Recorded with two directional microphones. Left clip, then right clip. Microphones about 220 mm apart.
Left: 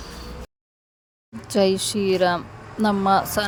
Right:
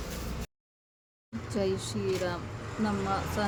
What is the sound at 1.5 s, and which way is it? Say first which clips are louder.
Speech: left 12 dB; 40° left (ahead or behind).